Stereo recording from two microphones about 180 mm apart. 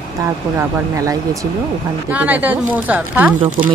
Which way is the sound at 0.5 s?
15° right (ahead or behind).